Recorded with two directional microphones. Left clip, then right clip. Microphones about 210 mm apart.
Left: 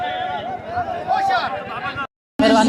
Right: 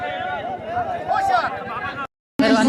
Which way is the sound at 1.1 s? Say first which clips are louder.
Left 1 dB; 10° right (ahead or behind).